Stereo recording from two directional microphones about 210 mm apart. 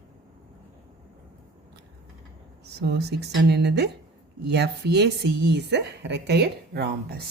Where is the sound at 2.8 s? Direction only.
50° right (ahead or behind).